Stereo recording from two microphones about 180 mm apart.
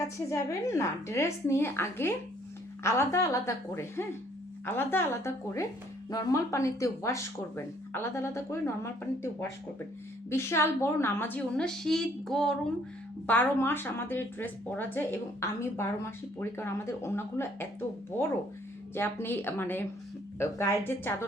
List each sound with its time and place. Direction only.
0.3 s speech: 15° left (ahead or behind)